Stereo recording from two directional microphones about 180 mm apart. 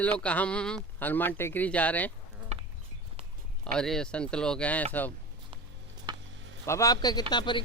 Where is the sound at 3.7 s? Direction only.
5° left (ahead or behind).